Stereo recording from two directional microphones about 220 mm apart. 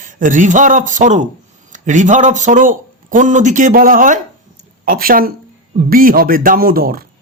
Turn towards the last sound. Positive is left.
turn(degrees=-40)  # may be behind; listen again after turning